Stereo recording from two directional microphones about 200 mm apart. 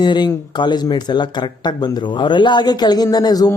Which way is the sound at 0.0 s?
20° left (ahead or behind).